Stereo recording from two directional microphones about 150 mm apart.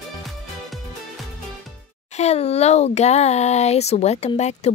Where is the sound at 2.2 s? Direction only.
45° left (ahead or behind).